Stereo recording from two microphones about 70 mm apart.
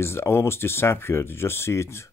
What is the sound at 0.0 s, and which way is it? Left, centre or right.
Speech, left.